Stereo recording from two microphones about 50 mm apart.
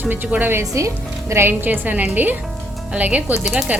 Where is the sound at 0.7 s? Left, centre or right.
Right.